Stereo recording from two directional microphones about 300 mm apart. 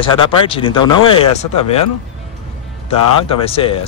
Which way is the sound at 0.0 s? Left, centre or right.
Centre.